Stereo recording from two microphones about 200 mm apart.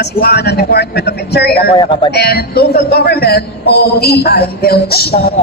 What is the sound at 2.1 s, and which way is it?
A man's voice, 55° left (ahead or behind).